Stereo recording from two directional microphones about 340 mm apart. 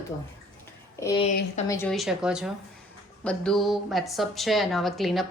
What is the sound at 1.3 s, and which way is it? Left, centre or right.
Speech, left.